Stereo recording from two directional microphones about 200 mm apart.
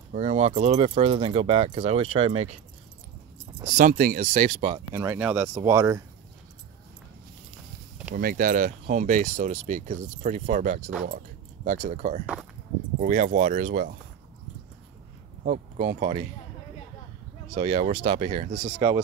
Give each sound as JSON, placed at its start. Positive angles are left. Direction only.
{"t": 0.1, "sound": "speech", "side_deg": -35}
{"t": 3.7, "sound": "speech", "side_deg": -45}
{"t": 4.6, "sound": "speech", "side_deg": -30}
{"t": 4.9, "sound": "speech", "side_deg": -15}
{"t": 8.1, "sound": "speech", "side_deg": -50}
{"t": 15.4, "sound": "speech", "side_deg": -40}
{"t": 17.6, "sound": "speech", "side_deg": -30}